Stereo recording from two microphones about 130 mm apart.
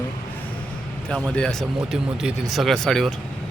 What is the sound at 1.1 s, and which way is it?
Speech, 5° left (ahead or behind).